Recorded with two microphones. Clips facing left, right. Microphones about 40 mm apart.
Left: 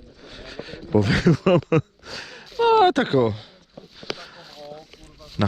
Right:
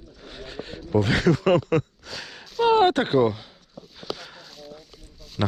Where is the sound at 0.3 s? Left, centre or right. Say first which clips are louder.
Even; left.